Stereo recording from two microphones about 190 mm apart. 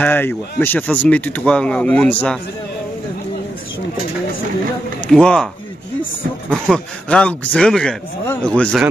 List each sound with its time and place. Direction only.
0.0 s speech: 10° left (ahead or behind)
5.0 s speech: 5° left (ahead or behind)
6.5 s speech: 5° left (ahead or behind)